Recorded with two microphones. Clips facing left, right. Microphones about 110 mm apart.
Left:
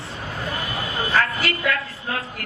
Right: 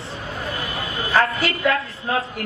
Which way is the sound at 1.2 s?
30° right (ahead or behind).